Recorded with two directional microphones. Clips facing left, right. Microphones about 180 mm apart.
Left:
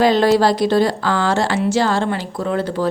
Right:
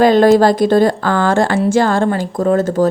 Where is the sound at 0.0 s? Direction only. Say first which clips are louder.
Right 5 dB; 50° right (ahead or behind).